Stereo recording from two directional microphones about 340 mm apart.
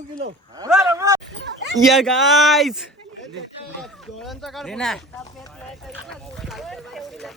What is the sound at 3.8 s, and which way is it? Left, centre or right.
Speech, centre.